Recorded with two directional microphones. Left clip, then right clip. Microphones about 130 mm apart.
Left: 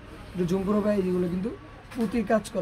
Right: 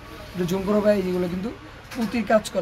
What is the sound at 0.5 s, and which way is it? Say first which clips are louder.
Speech: right 6 dB; 5° right (ahead or behind).